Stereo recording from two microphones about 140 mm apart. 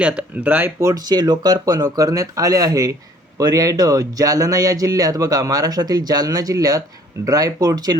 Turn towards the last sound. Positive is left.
turn(degrees=-25)  # may be behind; listen again after turning